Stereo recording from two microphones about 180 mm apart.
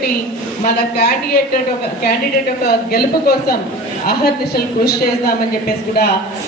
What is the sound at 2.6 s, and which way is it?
A woman's voice, 60° left (ahead or behind).